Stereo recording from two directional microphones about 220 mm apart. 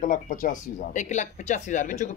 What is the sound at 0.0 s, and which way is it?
Speech, 35° left (ahead or behind).